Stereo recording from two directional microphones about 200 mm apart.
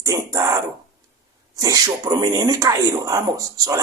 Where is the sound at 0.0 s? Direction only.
15° right (ahead or behind).